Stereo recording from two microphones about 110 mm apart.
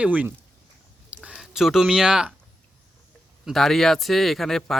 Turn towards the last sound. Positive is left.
turn(degrees=5)  # may be behind; listen again after turning